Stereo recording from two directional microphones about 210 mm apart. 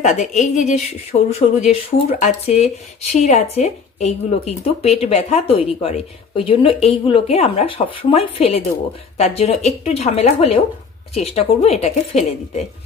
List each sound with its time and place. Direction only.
0.0 s a woman's voice: 35° left (ahead or behind)